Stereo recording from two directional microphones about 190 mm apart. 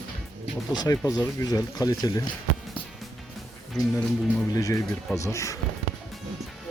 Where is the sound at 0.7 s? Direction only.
20° left (ahead or behind).